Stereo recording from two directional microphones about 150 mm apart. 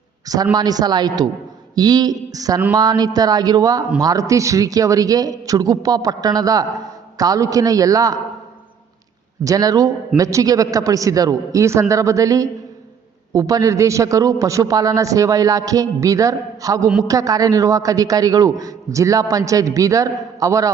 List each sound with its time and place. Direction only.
0.5 s a man's voice: 25° right (ahead or behind)
9.4 s a man's voice: 25° right (ahead or behind)